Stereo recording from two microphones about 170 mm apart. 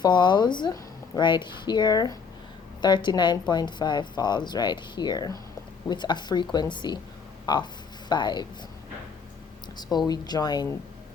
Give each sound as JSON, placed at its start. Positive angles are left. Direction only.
{"t": 0.0, "sound": "speech", "side_deg": 25}
{"t": 10.1, "sound": "speech", "side_deg": 25}